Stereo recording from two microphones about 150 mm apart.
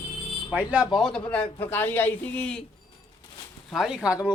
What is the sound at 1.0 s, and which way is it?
A man's voice, 5° left (ahead or behind).